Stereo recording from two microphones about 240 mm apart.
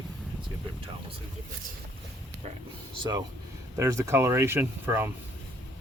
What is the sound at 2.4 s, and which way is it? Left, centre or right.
Speech, right.